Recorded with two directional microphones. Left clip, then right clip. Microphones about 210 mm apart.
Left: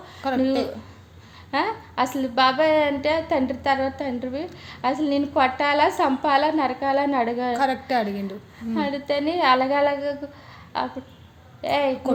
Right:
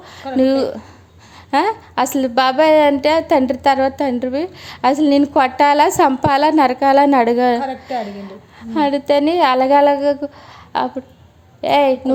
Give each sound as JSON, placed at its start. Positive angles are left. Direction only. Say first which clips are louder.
{"t": 0.2, "sound": "a woman's voice", "louder": "right 3 dB", "side_deg": 30}
{"t": 1.5, "sound": "a woman's voice", "louder": "right 8 dB", "side_deg": -50}
{"t": 7.6, "sound": "a woman's voice", "louder": "even", "side_deg": 30}
{"t": 8.7, "sound": "a woman's voice", "louder": "right 10 dB", "side_deg": -50}